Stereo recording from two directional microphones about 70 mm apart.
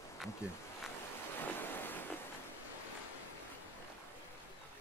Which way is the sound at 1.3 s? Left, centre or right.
Left.